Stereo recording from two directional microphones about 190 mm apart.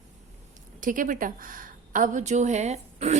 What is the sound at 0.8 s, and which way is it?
A woman's voice, 45° right (ahead or behind).